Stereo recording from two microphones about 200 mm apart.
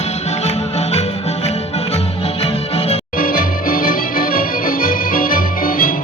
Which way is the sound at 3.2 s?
45° left (ahead or behind).